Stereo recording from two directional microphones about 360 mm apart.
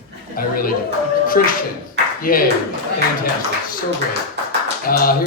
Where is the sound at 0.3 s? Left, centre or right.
Left.